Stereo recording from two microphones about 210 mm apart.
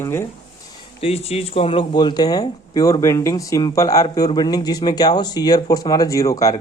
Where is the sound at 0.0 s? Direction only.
10° left (ahead or behind).